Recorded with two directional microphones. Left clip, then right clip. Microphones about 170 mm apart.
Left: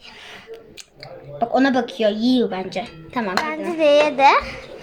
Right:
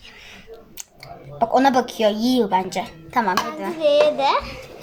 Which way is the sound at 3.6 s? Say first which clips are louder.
Left 1 dB; 25° left (ahead or behind).